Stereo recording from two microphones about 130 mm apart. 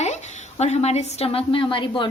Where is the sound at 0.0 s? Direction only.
60° left (ahead or behind).